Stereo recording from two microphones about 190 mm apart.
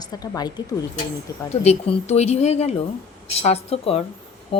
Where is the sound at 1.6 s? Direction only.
35° left (ahead or behind).